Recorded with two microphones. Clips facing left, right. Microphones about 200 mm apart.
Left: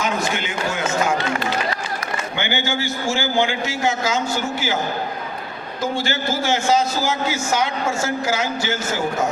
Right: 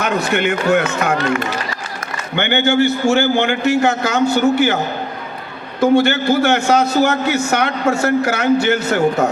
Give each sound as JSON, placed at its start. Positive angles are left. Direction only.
{"t": 0.0, "sound": "a man's voice", "side_deg": -65}
{"t": 5.8, "sound": "a man's voice", "side_deg": -65}